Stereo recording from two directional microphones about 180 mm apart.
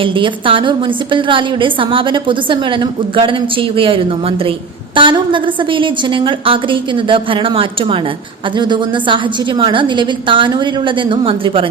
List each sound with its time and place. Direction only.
0.0 s a woman's voice: 30° right (ahead or behind)